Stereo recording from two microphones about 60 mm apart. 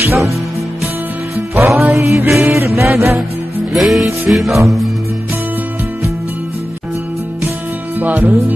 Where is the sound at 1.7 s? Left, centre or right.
Centre.